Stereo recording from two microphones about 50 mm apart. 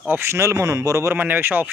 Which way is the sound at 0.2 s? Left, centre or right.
Right.